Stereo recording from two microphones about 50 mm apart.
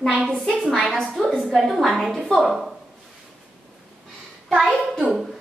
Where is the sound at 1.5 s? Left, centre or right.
Centre.